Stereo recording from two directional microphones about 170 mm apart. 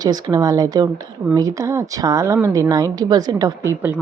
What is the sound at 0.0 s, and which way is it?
Speech, 25° right (ahead or behind).